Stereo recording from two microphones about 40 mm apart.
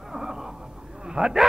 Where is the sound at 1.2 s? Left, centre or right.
Right.